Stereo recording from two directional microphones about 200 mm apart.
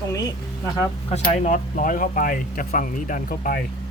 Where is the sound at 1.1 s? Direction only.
35° left (ahead or behind).